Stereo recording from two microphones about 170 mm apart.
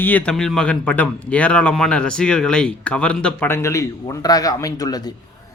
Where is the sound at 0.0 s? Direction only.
10° left (ahead or behind).